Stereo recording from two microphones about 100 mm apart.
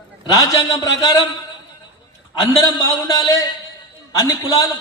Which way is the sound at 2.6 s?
35° left (ahead or behind).